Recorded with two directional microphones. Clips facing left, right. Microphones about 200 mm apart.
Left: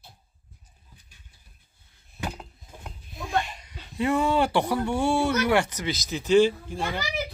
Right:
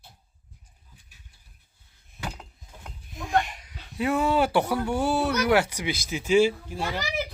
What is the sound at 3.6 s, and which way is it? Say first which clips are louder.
Speech: left 1 dB; centre (ahead or behind).